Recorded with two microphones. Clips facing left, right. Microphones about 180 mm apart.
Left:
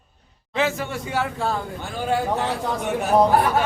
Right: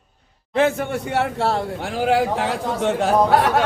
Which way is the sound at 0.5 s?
55° right (ahead or behind).